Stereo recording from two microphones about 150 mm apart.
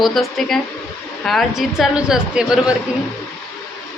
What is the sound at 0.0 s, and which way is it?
A woman's voice, centre (ahead or behind).